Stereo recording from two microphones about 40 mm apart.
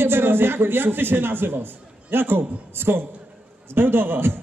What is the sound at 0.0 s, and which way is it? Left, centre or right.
A man's voice, right.